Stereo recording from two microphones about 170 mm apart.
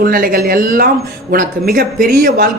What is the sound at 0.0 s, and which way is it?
Speech, 55° right (ahead or behind).